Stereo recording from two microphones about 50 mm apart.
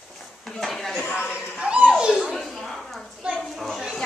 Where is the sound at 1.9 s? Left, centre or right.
Centre.